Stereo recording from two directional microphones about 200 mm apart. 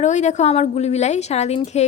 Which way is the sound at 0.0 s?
35° left (ahead or behind).